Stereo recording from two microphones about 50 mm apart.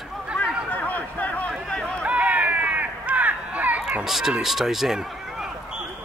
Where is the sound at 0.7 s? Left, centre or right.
Left.